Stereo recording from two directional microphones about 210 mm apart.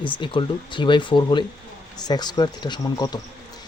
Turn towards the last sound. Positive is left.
turn(degrees=20)  # may be behind; listen again after turning